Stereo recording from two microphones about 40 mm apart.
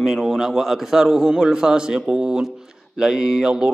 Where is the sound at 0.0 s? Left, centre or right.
Centre.